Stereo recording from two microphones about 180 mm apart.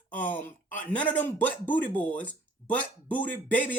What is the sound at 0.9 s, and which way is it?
Speech, 10° left (ahead or behind).